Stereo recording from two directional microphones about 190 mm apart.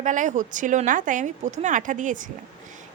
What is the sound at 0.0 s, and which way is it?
A woman's voice, 40° right (ahead or behind).